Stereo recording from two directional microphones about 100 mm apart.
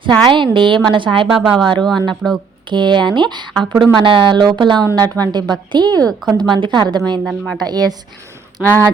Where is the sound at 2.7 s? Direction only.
50° right (ahead or behind).